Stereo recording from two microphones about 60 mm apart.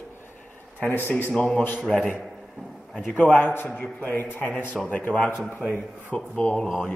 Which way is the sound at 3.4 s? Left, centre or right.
Left.